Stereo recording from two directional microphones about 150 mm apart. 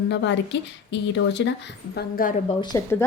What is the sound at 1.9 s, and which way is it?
Speech, 70° left (ahead or behind).